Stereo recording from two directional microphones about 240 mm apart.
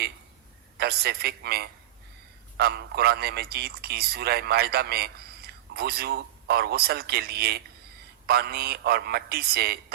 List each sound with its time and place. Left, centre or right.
0.8 s a man's voice: right